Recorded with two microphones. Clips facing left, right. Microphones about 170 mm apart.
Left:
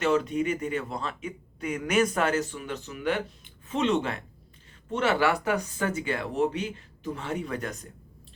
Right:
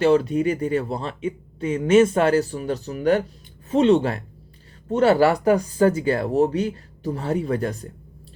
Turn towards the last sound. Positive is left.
turn(degrees=-35)  # may be behind; listen again after turning